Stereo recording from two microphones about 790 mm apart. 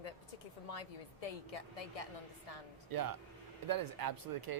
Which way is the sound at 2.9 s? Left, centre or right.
Right.